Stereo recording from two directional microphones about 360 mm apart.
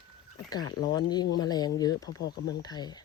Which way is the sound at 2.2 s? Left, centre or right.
Left.